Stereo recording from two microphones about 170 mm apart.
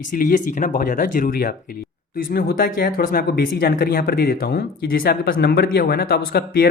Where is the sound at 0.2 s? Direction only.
50° left (ahead or behind).